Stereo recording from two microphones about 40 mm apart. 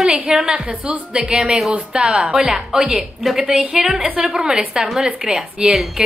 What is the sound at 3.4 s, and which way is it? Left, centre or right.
Speech, right.